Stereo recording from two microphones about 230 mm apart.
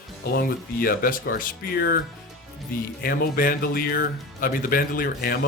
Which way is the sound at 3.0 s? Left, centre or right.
Left.